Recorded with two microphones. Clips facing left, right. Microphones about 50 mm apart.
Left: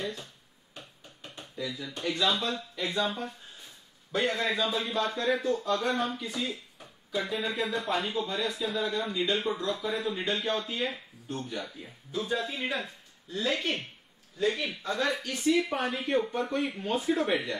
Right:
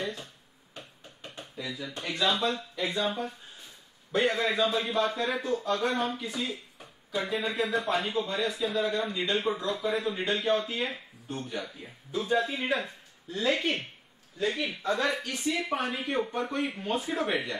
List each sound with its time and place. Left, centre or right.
0.0 s finger snapping: centre
1.3 s a sound: centre
1.8 s a man's voice: centre